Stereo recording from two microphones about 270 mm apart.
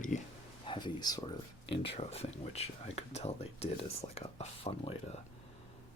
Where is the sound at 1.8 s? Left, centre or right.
Left.